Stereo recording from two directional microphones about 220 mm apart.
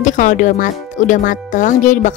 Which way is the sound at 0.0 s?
35° left (ahead or behind).